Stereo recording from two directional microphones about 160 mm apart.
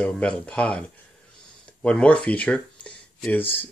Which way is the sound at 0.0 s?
5° left (ahead or behind).